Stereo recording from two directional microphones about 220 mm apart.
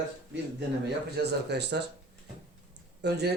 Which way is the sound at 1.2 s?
50° right (ahead or behind).